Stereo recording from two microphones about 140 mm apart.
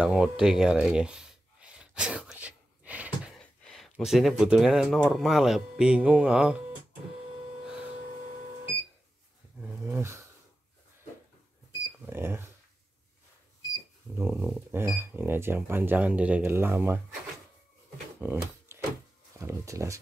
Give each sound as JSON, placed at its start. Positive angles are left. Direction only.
{"t": 0.0, "sound": "a sound", "side_deg": -5}
{"t": 3.3, "sound": "speech", "side_deg": 5}
{"t": 9.6, "sound": "a sound", "side_deg": -15}
{"t": 12.1, "sound": "speech", "side_deg": -15}
{"t": 14.1, "sound": "speech", "side_deg": -15}
{"t": 18.2, "sound": "shuffling cards", "side_deg": -15}
{"t": 19.4, "sound": "speech", "side_deg": -20}